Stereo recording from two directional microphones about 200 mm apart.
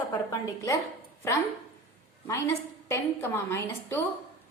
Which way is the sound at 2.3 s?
15° left (ahead or behind).